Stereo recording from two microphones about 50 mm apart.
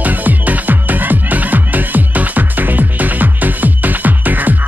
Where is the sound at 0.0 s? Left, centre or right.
Right.